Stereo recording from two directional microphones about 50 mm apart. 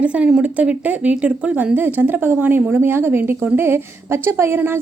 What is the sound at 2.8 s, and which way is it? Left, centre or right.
A woman's voice, right.